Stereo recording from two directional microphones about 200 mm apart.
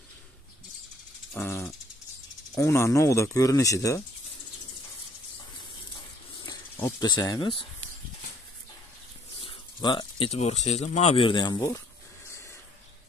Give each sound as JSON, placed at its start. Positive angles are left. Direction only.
{"t": 1.3, "sound": "a sound", "side_deg": 10}
{"t": 2.5, "sound": "speech", "side_deg": 15}
{"t": 6.4, "sound": "speech", "side_deg": 20}
{"t": 9.4, "sound": "speech", "side_deg": 25}